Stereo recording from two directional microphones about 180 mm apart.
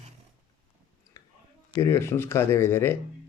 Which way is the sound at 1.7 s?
15° left (ahead or behind).